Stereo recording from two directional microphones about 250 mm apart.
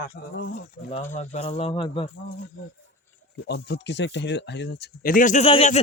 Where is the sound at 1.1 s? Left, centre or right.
Left.